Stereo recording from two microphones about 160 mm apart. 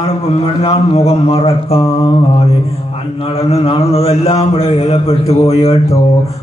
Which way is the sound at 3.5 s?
40° left (ahead or behind).